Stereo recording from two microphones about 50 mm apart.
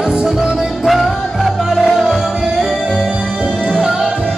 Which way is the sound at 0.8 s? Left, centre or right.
Centre.